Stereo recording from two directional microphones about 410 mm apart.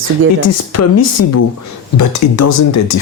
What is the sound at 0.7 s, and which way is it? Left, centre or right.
Speech, left.